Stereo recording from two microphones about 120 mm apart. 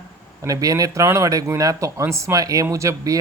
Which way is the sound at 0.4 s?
30° right (ahead or behind).